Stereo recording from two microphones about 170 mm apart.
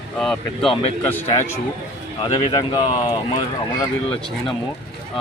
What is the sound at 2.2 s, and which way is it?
Speech, 30° left (ahead or behind).